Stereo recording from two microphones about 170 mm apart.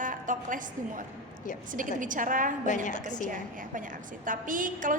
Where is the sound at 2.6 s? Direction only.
45° left (ahead or behind).